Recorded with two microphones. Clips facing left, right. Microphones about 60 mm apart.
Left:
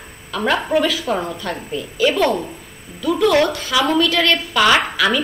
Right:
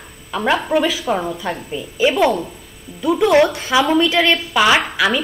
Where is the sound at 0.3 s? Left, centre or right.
Centre.